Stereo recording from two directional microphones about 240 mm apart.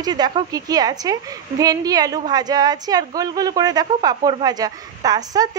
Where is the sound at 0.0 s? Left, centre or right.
Centre.